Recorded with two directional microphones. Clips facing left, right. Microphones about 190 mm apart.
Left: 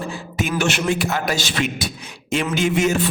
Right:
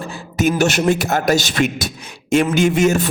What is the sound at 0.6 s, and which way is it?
A man's voice, 40° right (ahead or behind).